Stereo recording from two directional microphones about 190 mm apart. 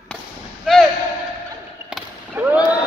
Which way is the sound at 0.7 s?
Centre (ahead or behind).